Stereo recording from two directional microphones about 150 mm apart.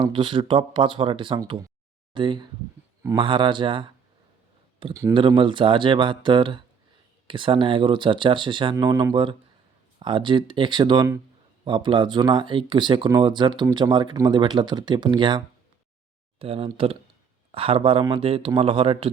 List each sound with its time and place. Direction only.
0.0 s speech: 35° right (ahead or behind)